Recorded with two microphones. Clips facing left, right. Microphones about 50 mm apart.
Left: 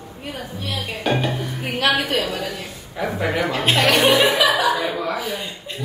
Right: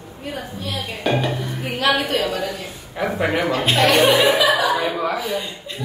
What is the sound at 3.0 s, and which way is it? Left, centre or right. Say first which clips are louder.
Speech: right 2 dB; centre.